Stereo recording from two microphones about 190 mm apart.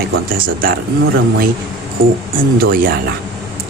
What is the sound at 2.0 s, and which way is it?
Speech, 50° right (ahead or behind).